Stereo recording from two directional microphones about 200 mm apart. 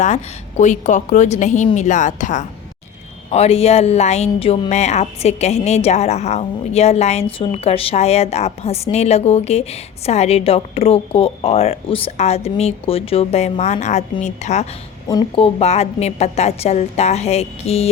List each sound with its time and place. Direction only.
0.0 s a woman's voice: 35° left (ahead or behind)
15.0 s a woman's voice: 25° left (ahead or behind)